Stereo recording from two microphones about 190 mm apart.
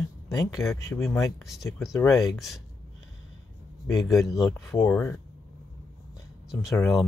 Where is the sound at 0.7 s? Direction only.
15° left (ahead or behind).